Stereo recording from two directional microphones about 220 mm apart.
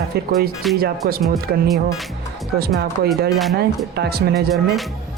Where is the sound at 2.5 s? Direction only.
45° right (ahead or behind).